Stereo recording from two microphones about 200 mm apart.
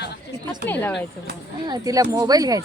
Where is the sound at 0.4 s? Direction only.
10° left (ahead or behind).